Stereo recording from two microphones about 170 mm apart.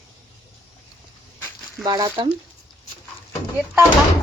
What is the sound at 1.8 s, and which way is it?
Speech, 20° right (ahead or behind).